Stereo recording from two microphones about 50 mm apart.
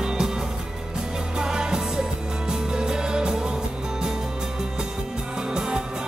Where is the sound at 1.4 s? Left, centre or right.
Centre.